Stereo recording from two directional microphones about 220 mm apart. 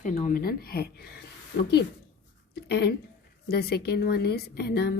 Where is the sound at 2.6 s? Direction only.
50° left (ahead or behind).